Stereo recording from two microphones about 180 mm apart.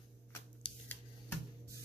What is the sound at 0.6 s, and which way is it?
Scissors, 30° left (ahead or behind).